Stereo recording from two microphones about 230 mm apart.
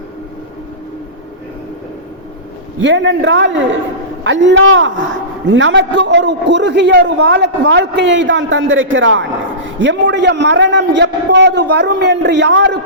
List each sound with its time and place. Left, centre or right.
2.8 s a man's voice: right